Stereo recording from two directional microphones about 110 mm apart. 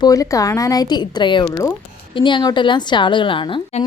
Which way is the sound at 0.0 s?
30° left (ahead or behind).